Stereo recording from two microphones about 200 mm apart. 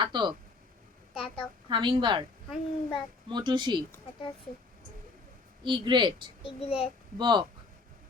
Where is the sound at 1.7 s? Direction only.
25° right (ahead or behind).